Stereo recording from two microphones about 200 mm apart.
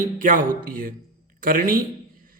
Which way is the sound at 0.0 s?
40° right (ahead or behind).